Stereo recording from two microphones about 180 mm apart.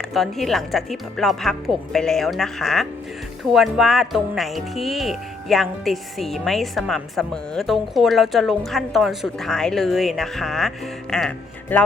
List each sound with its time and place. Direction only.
0.1 s speech: centre (ahead or behind)